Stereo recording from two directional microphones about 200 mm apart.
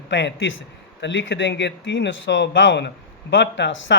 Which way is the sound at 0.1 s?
65° left (ahead or behind).